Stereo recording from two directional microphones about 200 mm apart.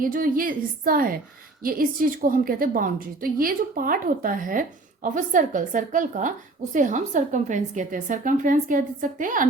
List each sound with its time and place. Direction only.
0.0 s a woman's voice: 45° right (ahead or behind)